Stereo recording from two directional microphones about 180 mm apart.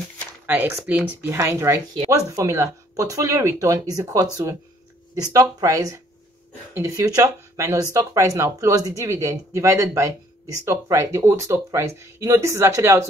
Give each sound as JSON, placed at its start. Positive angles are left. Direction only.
{"t": 0.5, "sound": "speech", "side_deg": -10}